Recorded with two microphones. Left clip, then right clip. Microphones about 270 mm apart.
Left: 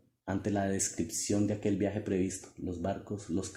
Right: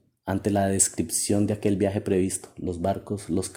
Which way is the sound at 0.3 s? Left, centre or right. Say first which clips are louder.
Right 8 dB; right.